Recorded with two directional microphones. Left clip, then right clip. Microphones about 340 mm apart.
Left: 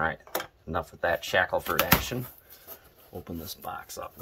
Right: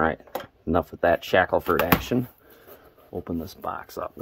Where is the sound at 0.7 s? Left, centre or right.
Right.